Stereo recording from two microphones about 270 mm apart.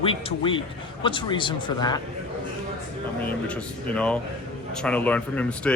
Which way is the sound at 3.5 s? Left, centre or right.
Centre.